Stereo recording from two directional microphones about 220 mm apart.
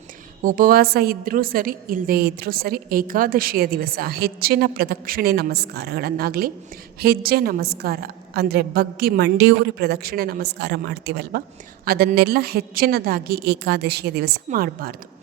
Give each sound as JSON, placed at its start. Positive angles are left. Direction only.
{"t": 0.4, "sound": "a woman's voice", "side_deg": -40}